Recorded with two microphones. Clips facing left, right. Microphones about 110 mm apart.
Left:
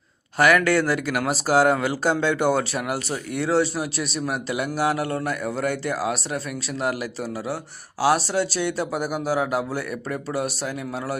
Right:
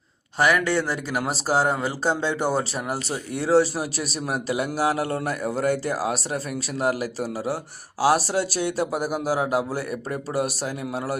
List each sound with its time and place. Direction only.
0.3 s a man's voice: 25° right (ahead or behind); by 11.2 s 40° right (ahead or behind)